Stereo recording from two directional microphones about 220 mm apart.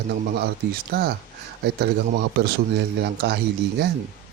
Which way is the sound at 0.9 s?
45° right (ahead or behind).